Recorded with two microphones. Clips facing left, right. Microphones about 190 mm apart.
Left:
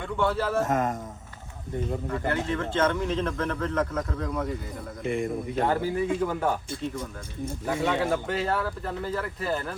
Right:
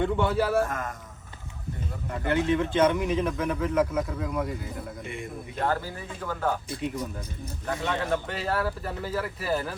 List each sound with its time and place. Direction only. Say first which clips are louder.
0.0 s speech: right 2 dB; 20° right (ahead or behind)
0.6 s a man's voice: left 4 dB; 20° left (ahead or behind)
2.2 s speech: right 7 dB; 20° right (ahead or behind)
5.6 s speech: left 3 dB; 15° left (ahead or behind)
7.7 s speech: left 2 dB; centre (ahead or behind)